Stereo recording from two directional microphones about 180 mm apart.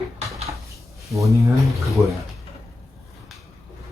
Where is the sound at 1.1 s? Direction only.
15° right (ahead or behind).